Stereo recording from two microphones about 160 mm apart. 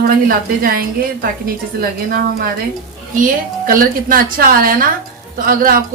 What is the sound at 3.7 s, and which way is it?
Speech, 65° right (ahead or behind).